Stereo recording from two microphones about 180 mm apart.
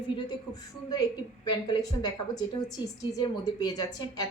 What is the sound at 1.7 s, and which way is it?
A woman's voice, 20° left (ahead or behind).